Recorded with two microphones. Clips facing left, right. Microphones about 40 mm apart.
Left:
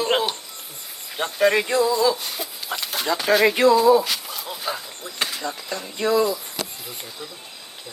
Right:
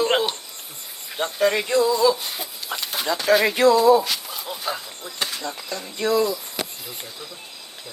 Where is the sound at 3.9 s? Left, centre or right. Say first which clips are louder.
Even; centre.